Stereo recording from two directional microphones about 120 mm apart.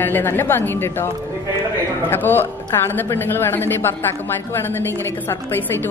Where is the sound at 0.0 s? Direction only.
15° left (ahead or behind).